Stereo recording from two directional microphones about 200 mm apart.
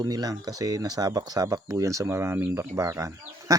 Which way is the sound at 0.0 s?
20° right (ahead or behind).